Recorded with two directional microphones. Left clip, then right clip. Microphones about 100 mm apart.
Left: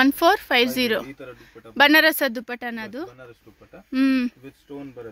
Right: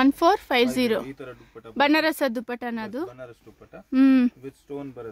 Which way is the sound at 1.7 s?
5° right (ahead or behind).